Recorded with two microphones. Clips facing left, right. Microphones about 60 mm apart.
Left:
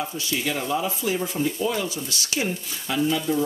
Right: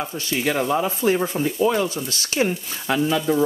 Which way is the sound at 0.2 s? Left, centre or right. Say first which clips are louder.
Right 8 dB; right.